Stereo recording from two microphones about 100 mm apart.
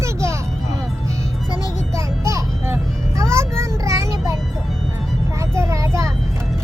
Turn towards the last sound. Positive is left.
turn(degrees=-30)  # may be behind; listen again after turning